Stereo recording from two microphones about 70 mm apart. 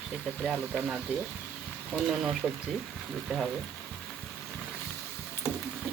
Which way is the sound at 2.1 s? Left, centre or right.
Centre.